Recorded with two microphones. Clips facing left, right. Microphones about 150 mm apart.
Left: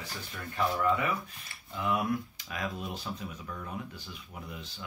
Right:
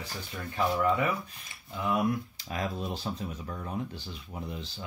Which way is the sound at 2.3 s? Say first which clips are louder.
Right 3 dB; 35° right (ahead or behind).